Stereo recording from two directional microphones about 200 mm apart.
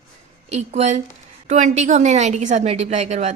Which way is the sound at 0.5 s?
35° right (ahead or behind).